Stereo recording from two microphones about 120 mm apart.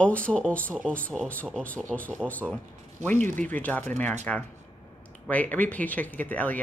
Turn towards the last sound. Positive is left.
turn(degrees=15)  # may be behind; listen again after turning